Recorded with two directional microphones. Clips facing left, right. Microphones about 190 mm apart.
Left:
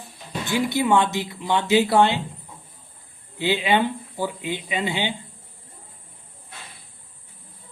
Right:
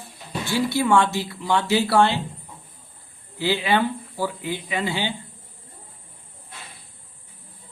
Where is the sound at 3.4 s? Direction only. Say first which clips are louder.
Even; 20° left (ahead or behind).